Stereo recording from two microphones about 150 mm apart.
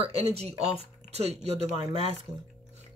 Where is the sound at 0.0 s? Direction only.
45° right (ahead or behind).